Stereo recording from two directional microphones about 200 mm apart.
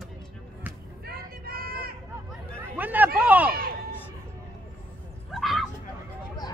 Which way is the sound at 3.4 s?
50° right (ahead or behind).